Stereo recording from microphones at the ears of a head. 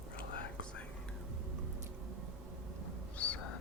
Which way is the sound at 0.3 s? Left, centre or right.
Left.